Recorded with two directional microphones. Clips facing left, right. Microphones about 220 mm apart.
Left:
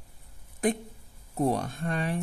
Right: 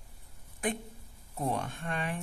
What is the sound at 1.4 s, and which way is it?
Speech, 40° left (ahead or behind).